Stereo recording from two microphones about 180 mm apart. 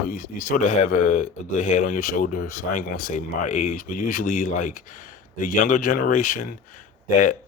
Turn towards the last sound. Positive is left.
turn(degrees=45)  # may be behind; listen again after turning